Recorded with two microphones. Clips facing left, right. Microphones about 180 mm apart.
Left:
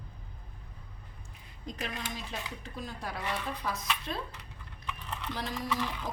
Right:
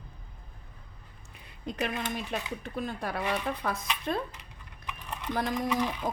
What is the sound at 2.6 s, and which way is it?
Speech, 60° right (ahead or behind).